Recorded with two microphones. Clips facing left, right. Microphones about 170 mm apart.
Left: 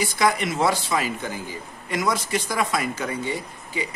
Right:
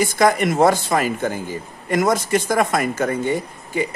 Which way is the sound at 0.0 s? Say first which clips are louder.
Right 6 dB; 50° right (ahead or behind).